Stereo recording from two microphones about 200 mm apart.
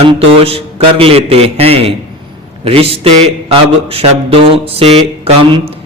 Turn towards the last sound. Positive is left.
turn(degrees=-30)  # may be behind; listen again after turning